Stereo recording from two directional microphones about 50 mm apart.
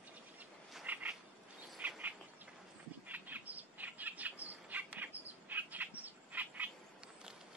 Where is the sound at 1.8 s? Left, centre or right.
Right.